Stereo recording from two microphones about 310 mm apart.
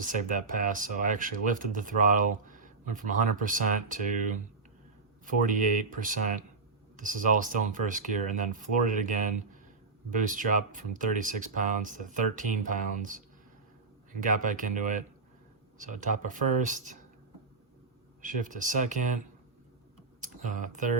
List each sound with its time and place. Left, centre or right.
0.0 s speech: right
5.2 s speech: right
18.2 s speech: right
20.2 s speech: right